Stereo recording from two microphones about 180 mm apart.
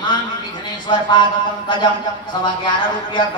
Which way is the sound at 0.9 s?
25° left (ahead or behind).